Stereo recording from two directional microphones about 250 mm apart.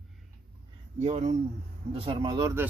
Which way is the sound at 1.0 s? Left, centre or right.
Right.